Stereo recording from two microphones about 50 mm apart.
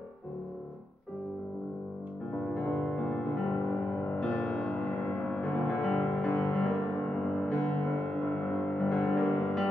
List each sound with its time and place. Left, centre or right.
2.3 s music: centre
3.5 s music: centre
5.8 s music: centre
7.6 s music: left
8.7 s music: centre